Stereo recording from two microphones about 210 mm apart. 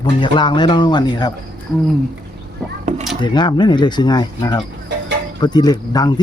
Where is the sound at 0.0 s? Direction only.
20° left (ahead or behind).